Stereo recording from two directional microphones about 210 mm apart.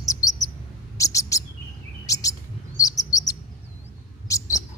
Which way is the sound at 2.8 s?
15° left (ahead or behind).